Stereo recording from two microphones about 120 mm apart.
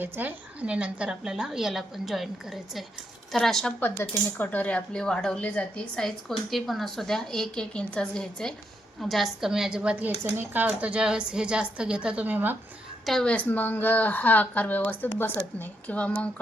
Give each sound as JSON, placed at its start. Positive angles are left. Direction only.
{"t": 0.0, "sound": "a woman's voice", "side_deg": -15}
{"t": 3.8, "sound": "a woman's voice", "side_deg": 15}
{"t": 13.1, "sound": "a woman's voice", "side_deg": 5}